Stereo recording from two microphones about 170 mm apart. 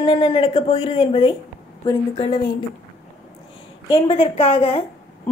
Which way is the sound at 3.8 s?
30° left (ahead or behind).